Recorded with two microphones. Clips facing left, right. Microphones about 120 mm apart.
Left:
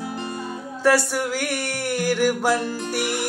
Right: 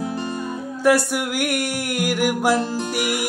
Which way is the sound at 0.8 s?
15° right (ahead or behind).